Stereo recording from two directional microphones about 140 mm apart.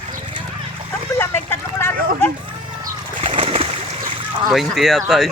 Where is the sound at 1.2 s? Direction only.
15° left (ahead or behind).